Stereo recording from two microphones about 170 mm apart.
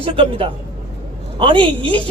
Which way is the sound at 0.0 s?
30° right (ahead or behind).